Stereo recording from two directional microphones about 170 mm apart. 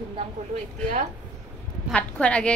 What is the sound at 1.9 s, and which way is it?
Speech, 5° left (ahead or behind).